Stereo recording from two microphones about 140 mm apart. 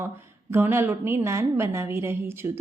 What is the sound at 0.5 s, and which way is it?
A woman's voice, 15° right (ahead or behind).